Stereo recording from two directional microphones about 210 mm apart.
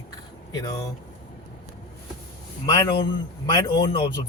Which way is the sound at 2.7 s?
20° left (ahead or behind).